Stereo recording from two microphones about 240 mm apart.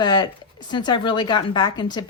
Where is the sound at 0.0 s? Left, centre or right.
Centre.